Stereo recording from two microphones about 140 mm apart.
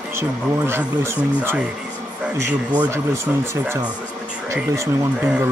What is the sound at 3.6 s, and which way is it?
Speech, 15° right (ahead or behind).